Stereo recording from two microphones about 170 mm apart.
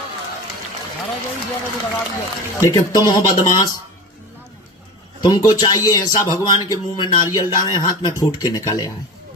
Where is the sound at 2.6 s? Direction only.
20° left (ahead or behind).